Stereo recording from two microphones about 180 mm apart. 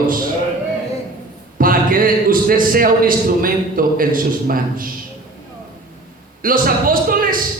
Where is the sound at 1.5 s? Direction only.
50° right (ahead or behind).